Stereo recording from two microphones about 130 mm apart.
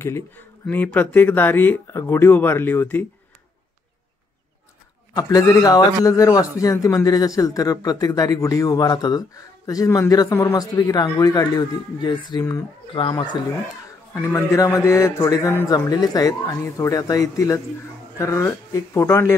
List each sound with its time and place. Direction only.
0.0 s speech: 15° left (ahead or behind)
5.1 s a man's voice: 25° left (ahead or behind)
12.9 s speech: 40° left (ahead or behind)
14.1 s a man's voice: 20° left (ahead or behind)